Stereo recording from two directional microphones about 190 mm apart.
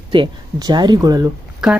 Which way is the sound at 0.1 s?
25° right (ahead or behind).